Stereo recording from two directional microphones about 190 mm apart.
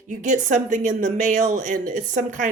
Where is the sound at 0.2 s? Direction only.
40° right (ahead or behind).